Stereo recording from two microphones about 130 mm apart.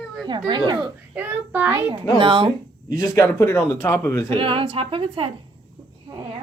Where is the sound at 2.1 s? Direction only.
40° right (ahead or behind).